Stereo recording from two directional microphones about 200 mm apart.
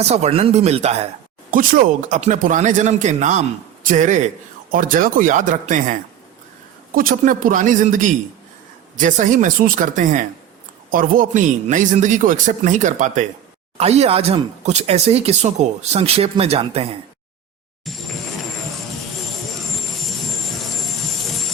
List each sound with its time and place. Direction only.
0.0 s speech: 35° right (ahead or behind)
1.5 s speech: 45° right (ahead or behind)
17.9 s a sound: centre (ahead or behind)